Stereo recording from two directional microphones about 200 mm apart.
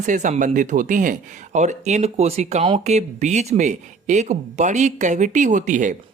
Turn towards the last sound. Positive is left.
turn(degrees=-40)  # may be behind; listen again after turning